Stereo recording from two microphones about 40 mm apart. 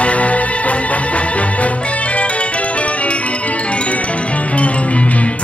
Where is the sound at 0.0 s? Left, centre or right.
Left.